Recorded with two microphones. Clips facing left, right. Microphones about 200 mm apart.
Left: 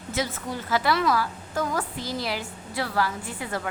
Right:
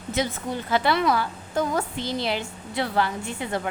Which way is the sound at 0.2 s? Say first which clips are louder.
Right 2 dB; 25° right (ahead or behind).